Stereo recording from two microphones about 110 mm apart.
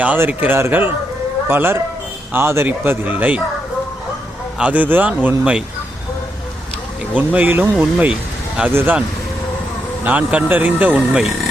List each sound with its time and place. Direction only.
0.0 s speech: 15° right (ahead or behind)
4.5 s speech: 10° right (ahead or behind)
7.1 s speech: 15° right (ahead or behind)
8.7 s speech: 20° right (ahead or behind)
10.0 s speech: 15° right (ahead or behind)